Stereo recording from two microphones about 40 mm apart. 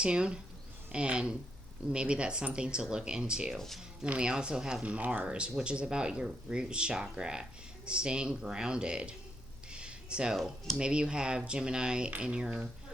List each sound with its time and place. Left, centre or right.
0.0 s speech: right
4.0 s speech: right
4.3 s speech: right
4.8 s speech: right
5.6 s speech: right
9.7 s a sound: right
10.8 s speech: right